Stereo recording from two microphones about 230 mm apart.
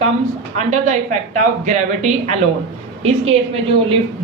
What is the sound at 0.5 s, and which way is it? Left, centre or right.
A woman's voice, right.